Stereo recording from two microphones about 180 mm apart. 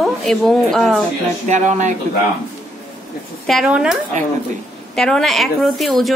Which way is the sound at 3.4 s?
Centre (ahead or behind).